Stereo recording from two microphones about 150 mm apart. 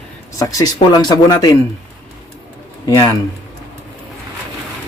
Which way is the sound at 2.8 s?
25° left (ahead or behind).